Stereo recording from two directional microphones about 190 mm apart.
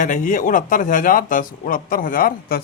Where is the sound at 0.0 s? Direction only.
40° left (ahead or behind).